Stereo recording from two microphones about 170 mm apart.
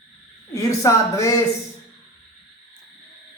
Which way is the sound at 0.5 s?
20° left (ahead or behind).